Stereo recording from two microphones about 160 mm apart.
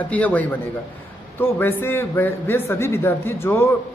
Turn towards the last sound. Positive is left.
turn(degrees=15)  # may be behind; listen again after turning